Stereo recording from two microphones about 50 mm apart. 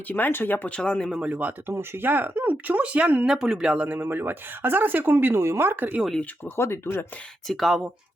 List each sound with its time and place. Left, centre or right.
0.1 s speech: left
0.8 s speech: centre
1.2 s speech: right
1.6 s speech: right
3.2 s speech: centre
3.8 s a woman's voice: right
6.6 s speech: left
7.4 s speech: centre